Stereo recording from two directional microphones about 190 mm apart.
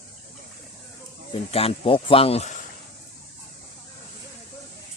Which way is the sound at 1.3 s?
30° left (ahead or behind).